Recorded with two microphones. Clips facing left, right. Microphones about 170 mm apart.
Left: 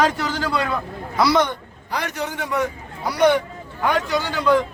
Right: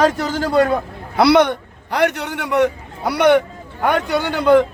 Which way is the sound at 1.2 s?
65° right (ahead or behind).